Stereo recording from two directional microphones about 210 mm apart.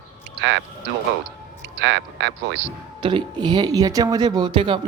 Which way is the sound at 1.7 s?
60° right (ahead or behind).